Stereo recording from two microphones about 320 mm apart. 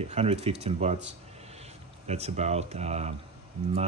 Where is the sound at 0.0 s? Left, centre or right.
Centre.